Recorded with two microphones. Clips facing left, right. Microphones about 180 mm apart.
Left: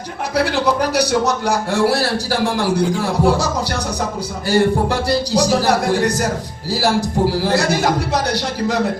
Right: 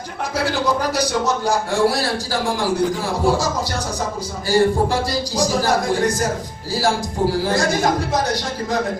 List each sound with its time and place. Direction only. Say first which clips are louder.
0.4 s a man's voice: even; 70° left (ahead or behind)